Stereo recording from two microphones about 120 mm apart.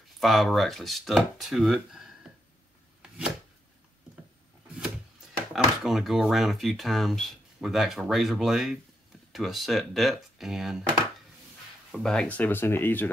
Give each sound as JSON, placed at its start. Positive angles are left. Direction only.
{"t": 0.2, "sound": "speech", "side_deg": 0}
{"t": 3.0, "sound": "a sound", "side_deg": -5}
{"t": 5.5, "sound": "speech", "side_deg": 0}
{"t": 11.9, "sound": "speech", "side_deg": 5}